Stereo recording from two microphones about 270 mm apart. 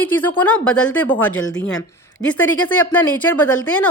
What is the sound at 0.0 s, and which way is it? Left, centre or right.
A woman's voice, centre.